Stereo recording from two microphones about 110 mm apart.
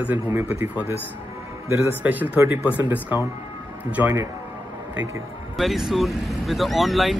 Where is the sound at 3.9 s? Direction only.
15° right (ahead or behind).